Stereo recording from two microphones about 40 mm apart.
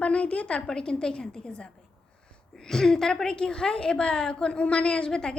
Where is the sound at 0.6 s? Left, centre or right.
Centre.